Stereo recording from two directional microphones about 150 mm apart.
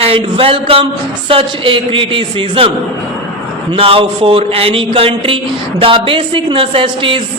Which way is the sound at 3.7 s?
40° right (ahead or behind).